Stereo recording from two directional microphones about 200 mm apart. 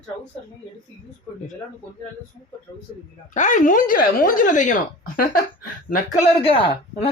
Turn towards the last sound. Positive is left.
turn(degrees=30)  # may be behind; listen again after turning